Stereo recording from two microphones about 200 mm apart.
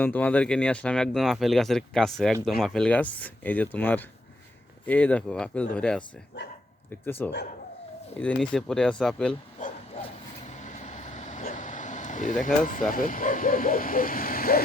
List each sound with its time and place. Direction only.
0.0 s speech: 10° left (ahead or behind)
7.0 s speech: 10° left (ahead or behind)
9.6 s bow-wow: 40° left (ahead or behind)
10.0 s vehicle: 35° left (ahead or behind)
12.9 s speech: 45° left (ahead or behind)